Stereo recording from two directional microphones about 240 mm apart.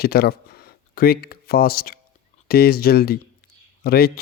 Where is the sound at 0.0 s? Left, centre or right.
Left.